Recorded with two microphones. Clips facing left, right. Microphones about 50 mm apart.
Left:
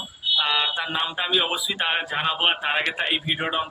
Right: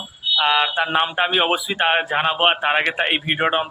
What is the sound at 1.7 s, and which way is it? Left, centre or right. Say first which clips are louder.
A man's voice: right 6 dB; right.